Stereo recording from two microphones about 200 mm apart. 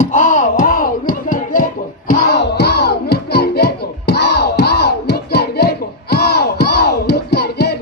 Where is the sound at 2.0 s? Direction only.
45° left (ahead or behind).